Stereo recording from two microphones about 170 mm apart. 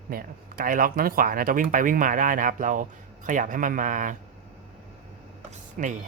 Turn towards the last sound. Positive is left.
turn(degrees=-45)  # may be behind; listen again after turning